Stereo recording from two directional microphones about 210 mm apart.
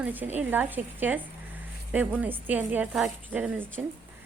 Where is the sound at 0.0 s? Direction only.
10° right (ahead or behind).